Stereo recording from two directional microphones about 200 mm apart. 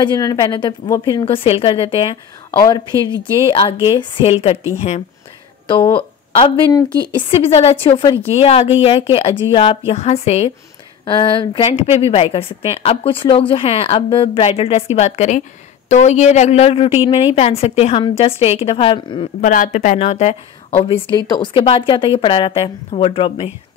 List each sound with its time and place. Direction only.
0.0 s a woman's voice: 20° left (ahead or behind)
1.2 s a woman's voice: 25° left (ahead or behind)
5.7 s a woman's voice: 20° left (ahead or behind)
19.4 s a woman's voice: 40° left (ahead or behind)